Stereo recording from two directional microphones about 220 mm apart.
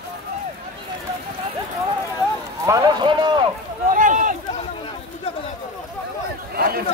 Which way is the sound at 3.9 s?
35° right (ahead or behind).